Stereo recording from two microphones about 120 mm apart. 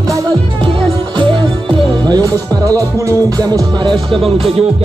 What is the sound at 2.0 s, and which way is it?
Music, 30° right (ahead or behind).